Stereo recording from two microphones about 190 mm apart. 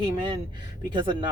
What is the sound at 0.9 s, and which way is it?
Speech, 25° right (ahead or behind).